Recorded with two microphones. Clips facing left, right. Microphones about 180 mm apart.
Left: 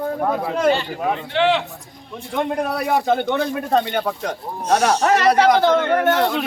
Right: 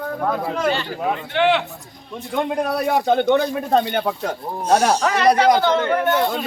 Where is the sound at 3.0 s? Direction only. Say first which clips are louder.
Right 3 dB; 5° left (ahead or behind).